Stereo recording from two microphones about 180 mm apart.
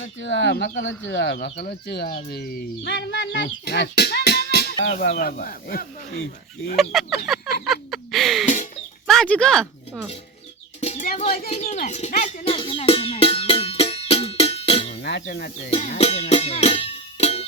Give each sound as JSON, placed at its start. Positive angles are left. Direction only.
{"t": 0.0, "sound": "speech", "side_deg": 90}
{"t": 0.8, "sound": "speech", "side_deg": 90}
{"t": 3.4, "sound": "speech", "side_deg": 60}
{"t": 6.7, "sound": "speech", "side_deg": 0}
{"t": 7.6, "sound": "a sound", "side_deg": 0}
{"t": 9.0, "sound": "speech", "side_deg": 5}
{"t": 10.8, "sound": "bird", "side_deg": 40}
{"t": 11.2, "sound": "speech", "side_deg": 35}
{"t": 12.5, "sound": "music", "side_deg": 30}
{"t": 15.0, "sound": "speech", "side_deg": 70}
{"t": 15.7, "sound": "music", "side_deg": 35}